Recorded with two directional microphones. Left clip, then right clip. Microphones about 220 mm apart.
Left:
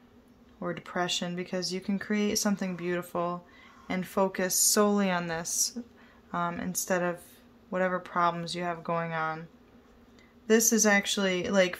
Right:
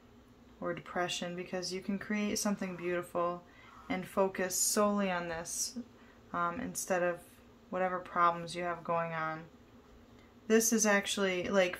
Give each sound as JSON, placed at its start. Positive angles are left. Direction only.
{"t": 0.6, "sound": "speech", "side_deg": 35}
{"t": 10.4, "sound": "speech", "side_deg": 35}